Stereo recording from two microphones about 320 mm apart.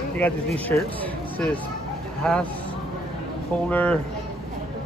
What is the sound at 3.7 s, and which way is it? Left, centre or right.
Speech, centre.